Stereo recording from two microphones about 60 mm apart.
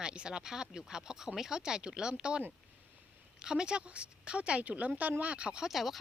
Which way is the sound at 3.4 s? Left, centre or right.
Centre.